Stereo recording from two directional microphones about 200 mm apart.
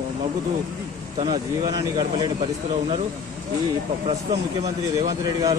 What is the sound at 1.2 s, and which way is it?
Speech, 20° right (ahead or behind).